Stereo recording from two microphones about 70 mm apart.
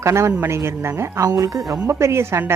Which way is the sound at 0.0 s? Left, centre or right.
Right.